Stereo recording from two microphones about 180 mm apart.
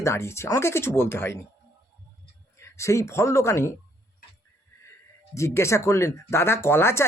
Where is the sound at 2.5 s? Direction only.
15° left (ahead or behind).